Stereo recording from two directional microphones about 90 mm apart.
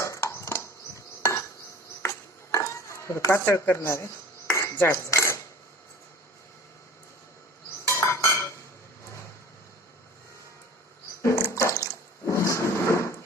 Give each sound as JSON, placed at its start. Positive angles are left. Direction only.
{"t": 0.0, "sound": "a sound", "side_deg": 35}
{"t": 2.0, "sound": "dishes", "side_deg": 30}
{"t": 4.7, "sound": "cutlery", "side_deg": 25}
{"t": 7.9, "sound": "cutlery", "side_deg": 30}
{"t": 11.2, "sound": "a sound", "side_deg": 30}
{"t": 11.5, "sound": "water", "side_deg": 35}